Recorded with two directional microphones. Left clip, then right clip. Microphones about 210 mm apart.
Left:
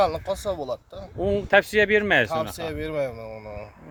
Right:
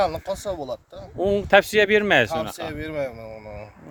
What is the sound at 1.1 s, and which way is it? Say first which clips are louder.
Speech: right 3 dB; 30° right (ahead or behind).